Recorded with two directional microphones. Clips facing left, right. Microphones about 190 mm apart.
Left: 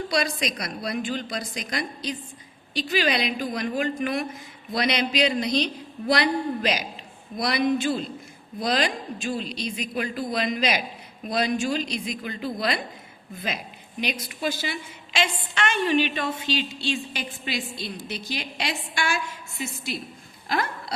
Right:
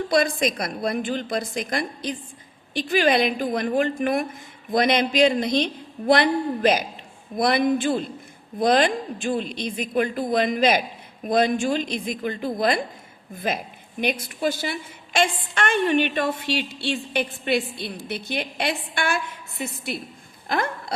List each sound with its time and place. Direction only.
0.1 s a woman's voice: 50° right (ahead or behind)